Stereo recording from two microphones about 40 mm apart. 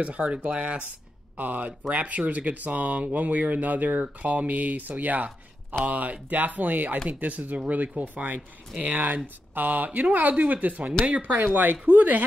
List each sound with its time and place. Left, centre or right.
0.0 s speech: right